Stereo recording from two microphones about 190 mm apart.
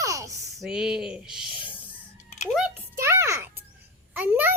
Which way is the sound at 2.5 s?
5° right (ahead or behind).